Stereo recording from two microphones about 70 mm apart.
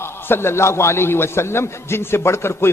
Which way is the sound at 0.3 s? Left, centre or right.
Left.